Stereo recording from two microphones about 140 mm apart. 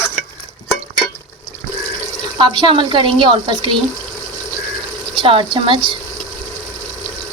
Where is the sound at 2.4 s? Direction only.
35° right (ahead or behind).